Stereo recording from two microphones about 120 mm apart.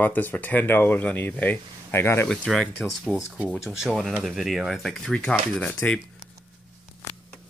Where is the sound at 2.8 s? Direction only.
Centre (ahead or behind); by 5.9 s 15° left (ahead or behind).